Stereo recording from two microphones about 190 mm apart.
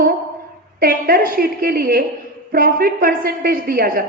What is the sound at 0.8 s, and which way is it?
A woman's voice, 50° right (ahead or behind).